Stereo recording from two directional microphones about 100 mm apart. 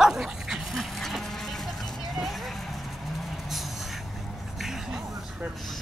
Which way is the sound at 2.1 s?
Centre (ahead or behind).